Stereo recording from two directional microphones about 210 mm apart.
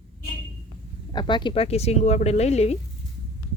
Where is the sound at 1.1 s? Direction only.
20° left (ahead or behind).